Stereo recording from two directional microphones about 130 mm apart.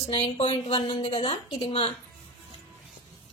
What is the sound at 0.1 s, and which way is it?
A woman's voice, 45° left (ahead or behind).